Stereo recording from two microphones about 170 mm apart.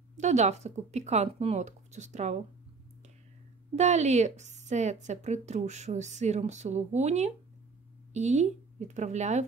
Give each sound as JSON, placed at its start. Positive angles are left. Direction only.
{"t": 0.2, "sound": "a woman's voice", "side_deg": -45}
{"t": 3.7, "sound": "a woman's voice", "side_deg": -40}